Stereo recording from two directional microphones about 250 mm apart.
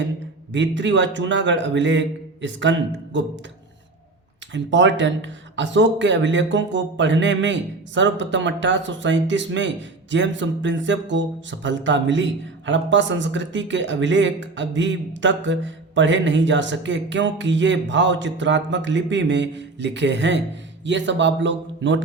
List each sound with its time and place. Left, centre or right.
0.5 s a man's voice: right
4.5 s a man's voice: right